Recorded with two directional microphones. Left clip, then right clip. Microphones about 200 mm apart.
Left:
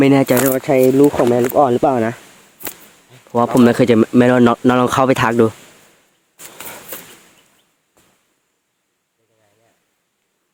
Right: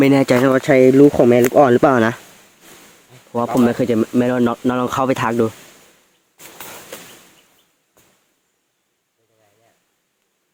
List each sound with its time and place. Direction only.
0.0 s speech: 10° left (ahead or behind)
0.4 s speech: 10° right (ahead or behind)
1.0 s speech: 25° right (ahead or behind)
3.1 s speech: 30° left (ahead or behind)
6.3 s a sound: 55° left (ahead or behind)